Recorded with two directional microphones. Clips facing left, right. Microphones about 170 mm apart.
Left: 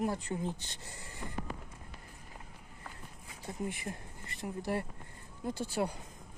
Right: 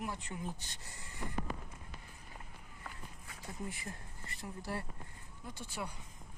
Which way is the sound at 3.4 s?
20° left (ahead or behind).